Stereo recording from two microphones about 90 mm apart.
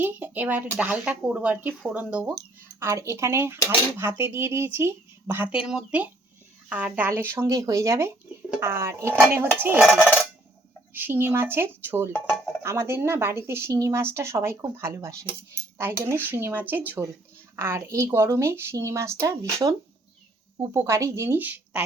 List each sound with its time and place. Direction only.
0.0 s speech: 20° right (ahead or behind)
2.8 s speech: 35° right (ahead or behind)
5.5 s speech: 10° right (ahead or behind); by 7.4 s 25° right (ahead or behind)
7.4 s speech: 40° right (ahead or behind); by 9.8 s 25° right (ahead or behind)
10.9 s speech: 25° right (ahead or behind)
17.6 s speech: 30° right (ahead or behind)
20.7 s speech: 30° right (ahead or behind)